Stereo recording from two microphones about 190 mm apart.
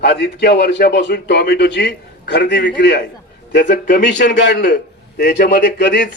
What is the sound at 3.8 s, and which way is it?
Speech, 40° left (ahead or behind).